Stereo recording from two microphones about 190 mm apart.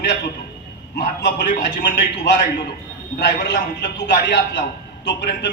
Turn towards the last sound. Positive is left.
turn(degrees=65)  # may be behind; listen again after turning